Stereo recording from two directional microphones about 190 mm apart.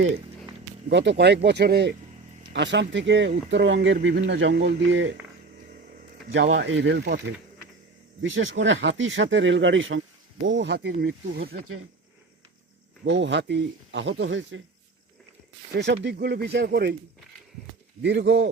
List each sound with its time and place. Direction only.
0.9 s speech: 70° right (ahead or behind)
6.3 s speech: 65° right (ahead or behind)
8.4 s speech: 80° right
10.4 s speech: 70° right (ahead or behind)
13.1 s speech: 70° right (ahead or behind)
15.7 s speech: 65° right (ahead or behind)
18.0 s speech: 65° right (ahead or behind)